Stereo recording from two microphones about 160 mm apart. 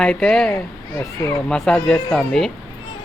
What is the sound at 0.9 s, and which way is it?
Speech, 20° left (ahead or behind).